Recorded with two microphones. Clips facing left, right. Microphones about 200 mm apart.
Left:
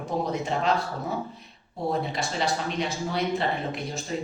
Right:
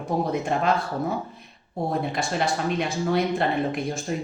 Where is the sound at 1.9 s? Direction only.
55° right (ahead or behind).